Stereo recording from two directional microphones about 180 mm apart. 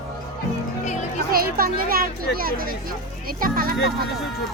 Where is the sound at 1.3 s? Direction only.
55° right (ahead or behind).